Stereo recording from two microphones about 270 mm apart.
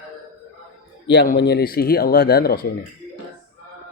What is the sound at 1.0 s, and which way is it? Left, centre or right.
Speech, left.